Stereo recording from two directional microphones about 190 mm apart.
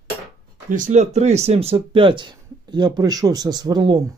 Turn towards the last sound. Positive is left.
turn(degrees=-20)  # may be behind; listen again after turning